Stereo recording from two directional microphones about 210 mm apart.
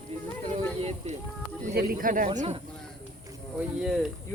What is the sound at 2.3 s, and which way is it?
Speech, 30° right (ahead or behind).